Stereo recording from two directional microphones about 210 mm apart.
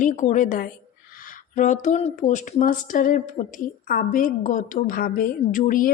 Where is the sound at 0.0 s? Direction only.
35° left (ahead or behind).